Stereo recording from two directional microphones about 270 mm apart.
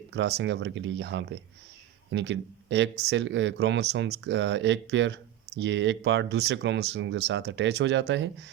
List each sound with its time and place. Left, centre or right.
0.1 s speech: right